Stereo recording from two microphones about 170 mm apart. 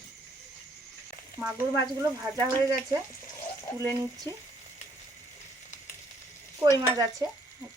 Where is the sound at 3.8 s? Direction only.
20° right (ahead or behind).